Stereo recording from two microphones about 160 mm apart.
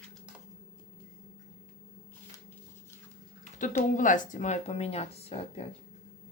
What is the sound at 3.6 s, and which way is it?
Speech, 55° left (ahead or behind).